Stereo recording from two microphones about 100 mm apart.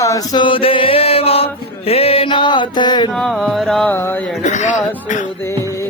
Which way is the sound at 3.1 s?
5° left (ahead or behind).